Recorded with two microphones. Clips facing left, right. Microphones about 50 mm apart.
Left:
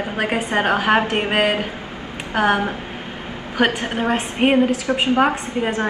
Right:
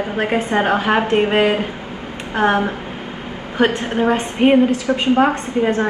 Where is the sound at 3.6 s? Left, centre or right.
Left.